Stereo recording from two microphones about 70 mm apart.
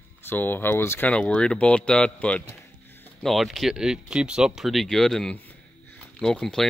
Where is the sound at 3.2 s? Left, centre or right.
Centre.